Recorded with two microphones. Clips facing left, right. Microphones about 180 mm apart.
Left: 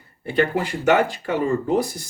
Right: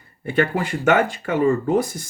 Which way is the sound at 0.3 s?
50° right (ahead or behind).